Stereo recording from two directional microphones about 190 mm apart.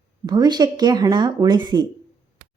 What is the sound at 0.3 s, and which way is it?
A woman's voice, 20° right (ahead or behind).